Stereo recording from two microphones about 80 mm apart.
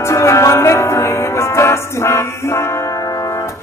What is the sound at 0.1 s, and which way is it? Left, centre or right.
Music, left.